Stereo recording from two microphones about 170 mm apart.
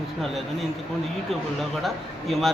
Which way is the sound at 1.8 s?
Centre (ahead or behind).